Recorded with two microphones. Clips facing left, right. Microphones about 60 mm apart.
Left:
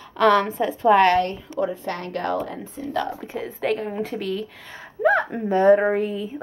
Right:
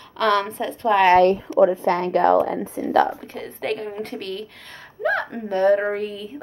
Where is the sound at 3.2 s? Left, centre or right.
Centre.